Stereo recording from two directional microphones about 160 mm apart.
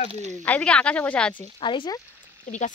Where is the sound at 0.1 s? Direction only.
45° right (ahead or behind).